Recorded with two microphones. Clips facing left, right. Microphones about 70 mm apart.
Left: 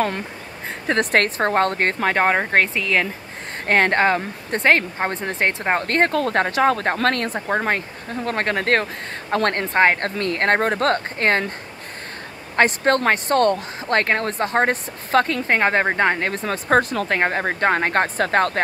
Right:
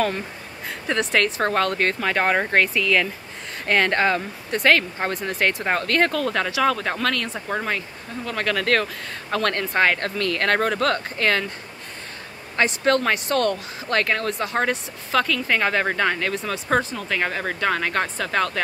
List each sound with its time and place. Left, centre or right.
0.8 s speech: left
1.4 s speech: left
12.5 s speech: left
16.9 s speech: left
17.2 s speech: left